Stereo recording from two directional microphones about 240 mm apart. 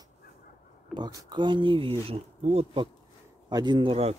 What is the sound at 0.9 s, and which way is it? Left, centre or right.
Speech, centre.